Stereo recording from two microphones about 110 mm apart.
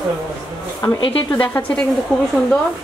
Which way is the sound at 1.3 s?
15° left (ahead or behind).